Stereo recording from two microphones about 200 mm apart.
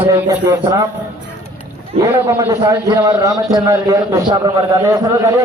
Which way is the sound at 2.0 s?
15° right (ahead or behind).